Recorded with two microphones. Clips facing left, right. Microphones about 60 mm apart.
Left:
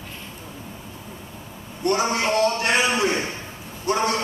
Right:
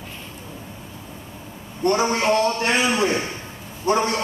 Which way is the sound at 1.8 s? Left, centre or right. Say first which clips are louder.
Right 2 dB; right.